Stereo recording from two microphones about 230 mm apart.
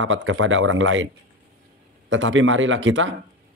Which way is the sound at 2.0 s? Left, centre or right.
Right.